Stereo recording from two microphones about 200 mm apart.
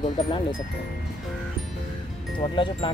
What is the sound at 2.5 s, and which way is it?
Speech, 25° left (ahead or behind).